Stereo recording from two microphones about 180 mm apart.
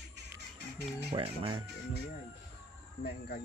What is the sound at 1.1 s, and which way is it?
Speech, 30° right (ahead or behind).